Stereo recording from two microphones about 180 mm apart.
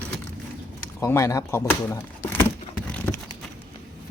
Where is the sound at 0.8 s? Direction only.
15° left (ahead or behind).